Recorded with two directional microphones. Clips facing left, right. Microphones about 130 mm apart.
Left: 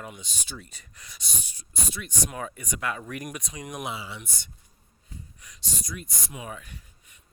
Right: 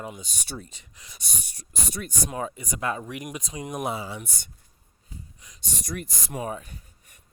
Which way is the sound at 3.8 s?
45° right (ahead or behind).